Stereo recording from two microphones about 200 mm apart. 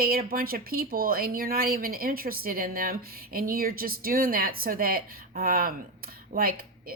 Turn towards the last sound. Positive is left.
turn(degrees=-45)  # may be behind; listen again after turning